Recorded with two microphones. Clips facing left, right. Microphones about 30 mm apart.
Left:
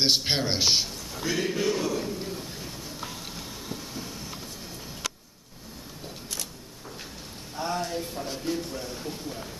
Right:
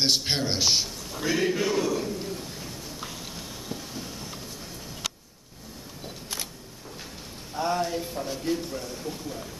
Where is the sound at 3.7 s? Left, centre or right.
Centre.